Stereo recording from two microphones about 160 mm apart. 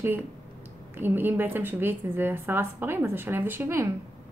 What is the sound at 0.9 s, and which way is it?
A woman's voice, 15° right (ahead or behind).